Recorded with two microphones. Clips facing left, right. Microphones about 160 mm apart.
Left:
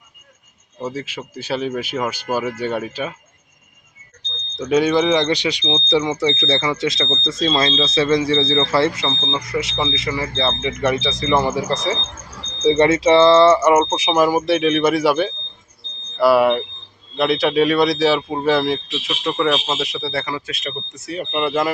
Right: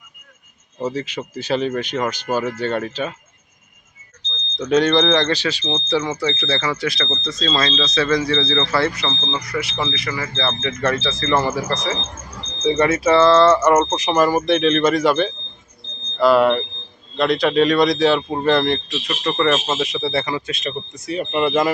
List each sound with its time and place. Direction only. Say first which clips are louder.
0.9 s speech: right 3 dB; 10° left (ahead or behind)
4.5 s speech: even; 5° left (ahead or behind); by 9.0 s 25° left (ahead or behind)
9.0 s speech: left 1 dB; 15° left (ahead or behind)